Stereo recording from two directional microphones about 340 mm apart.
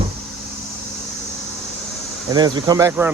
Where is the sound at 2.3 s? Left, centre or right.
Centre.